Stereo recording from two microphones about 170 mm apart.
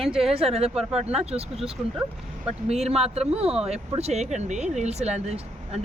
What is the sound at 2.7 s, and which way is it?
Speech, 40° right (ahead or behind).